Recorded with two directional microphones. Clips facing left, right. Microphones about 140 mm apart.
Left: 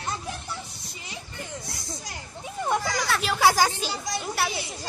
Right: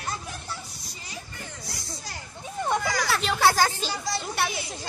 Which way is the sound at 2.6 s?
Centre (ahead or behind).